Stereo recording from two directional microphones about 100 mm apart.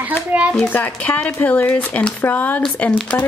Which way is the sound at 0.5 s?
15° left (ahead or behind).